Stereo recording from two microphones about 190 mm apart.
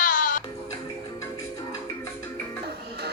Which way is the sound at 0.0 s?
45° left (ahead or behind).